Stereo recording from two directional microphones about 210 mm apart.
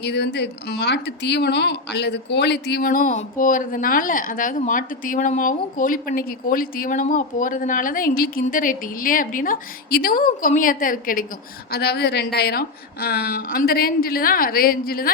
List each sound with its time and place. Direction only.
0.0 s a woman's voice: 55° left (ahead or behind)